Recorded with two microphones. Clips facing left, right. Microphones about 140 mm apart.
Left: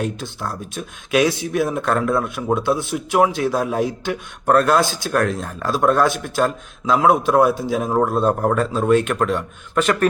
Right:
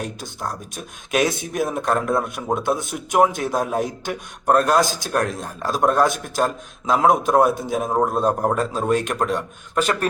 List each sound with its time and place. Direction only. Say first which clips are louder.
0.2 s speech: left 2 dB; 45° right (ahead or behind)